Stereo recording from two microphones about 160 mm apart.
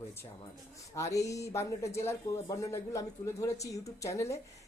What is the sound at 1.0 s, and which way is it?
Speech, 20° left (ahead or behind).